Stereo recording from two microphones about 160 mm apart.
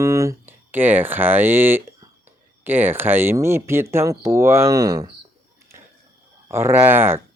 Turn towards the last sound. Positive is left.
turn(degrees=-15)  # may be behind; listen again after turning